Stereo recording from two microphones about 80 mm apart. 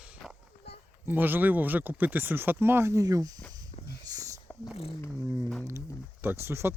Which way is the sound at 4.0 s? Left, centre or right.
Right.